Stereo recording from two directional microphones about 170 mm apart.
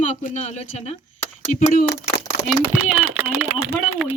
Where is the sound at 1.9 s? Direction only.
90° left.